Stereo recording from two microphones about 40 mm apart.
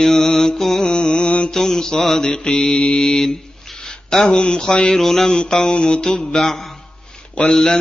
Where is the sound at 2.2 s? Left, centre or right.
Left.